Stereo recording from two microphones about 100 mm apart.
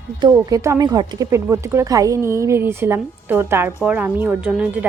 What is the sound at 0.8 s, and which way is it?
A woman's voice, 40° right (ahead or behind).